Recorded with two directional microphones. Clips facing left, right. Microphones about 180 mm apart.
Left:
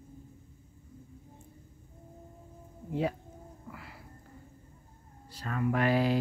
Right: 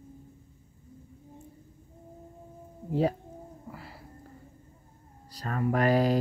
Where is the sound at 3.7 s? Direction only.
35° right (ahead or behind).